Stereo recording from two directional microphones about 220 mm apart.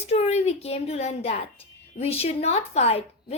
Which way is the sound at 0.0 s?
30° left (ahead or behind).